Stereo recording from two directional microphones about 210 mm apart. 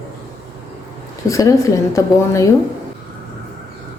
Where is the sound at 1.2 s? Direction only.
15° left (ahead or behind).